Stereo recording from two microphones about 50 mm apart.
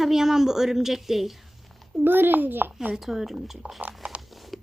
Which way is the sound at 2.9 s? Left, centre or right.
Centre.